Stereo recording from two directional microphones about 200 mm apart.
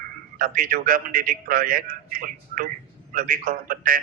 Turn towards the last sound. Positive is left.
turn(degrees=-45)  # may be behind; listen again after turning